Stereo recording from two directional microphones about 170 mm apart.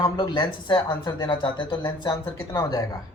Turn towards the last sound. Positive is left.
turn(degrees=20)  # may be behind; listen again after turning